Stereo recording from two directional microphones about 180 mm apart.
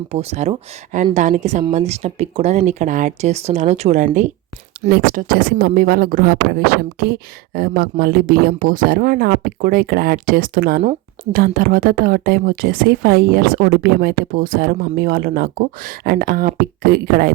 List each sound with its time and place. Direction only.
0.1 s speech: 35° right (ahead or behind)
4.9 s speech: 55° right (ahead or behind)